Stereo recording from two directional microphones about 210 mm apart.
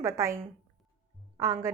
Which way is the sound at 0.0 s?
15° right (ahead or behind).